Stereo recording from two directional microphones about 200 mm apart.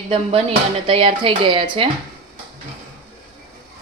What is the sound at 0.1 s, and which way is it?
Speech, 30° right (ahead or behind).